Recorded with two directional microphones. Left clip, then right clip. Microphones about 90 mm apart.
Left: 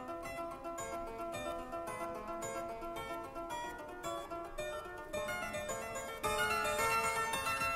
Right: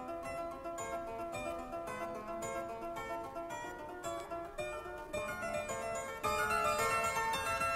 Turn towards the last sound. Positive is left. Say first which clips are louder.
# right 1 dB
turn(degrees=35)  # may be behind; listen again after turning